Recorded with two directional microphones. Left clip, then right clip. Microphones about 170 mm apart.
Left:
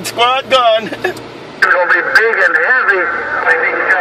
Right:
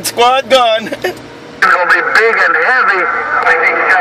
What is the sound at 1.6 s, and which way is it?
A man's voice, 45° right (ahead or behind).